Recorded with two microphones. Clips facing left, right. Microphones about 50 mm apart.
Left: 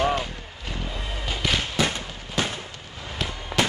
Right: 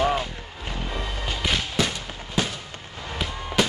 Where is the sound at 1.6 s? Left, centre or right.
Centre.